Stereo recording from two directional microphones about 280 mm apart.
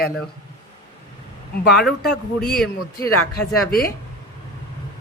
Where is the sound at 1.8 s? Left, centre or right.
Centre.